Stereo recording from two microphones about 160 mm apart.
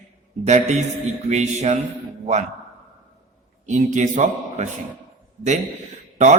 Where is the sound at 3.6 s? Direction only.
50° right (ahead or behind).